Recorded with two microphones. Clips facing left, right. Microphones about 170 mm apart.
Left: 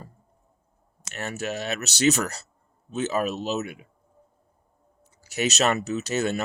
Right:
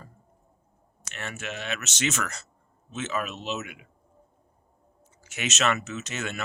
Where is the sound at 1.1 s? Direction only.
40° left (ahead or behind).